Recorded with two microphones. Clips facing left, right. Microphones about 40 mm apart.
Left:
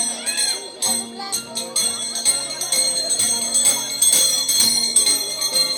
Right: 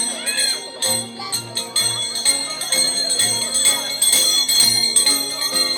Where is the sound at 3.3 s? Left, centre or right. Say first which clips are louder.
Right 2 dB; right.